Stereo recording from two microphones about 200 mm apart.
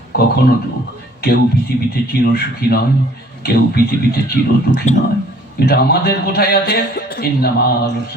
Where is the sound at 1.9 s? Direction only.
50° left (ahead or behind).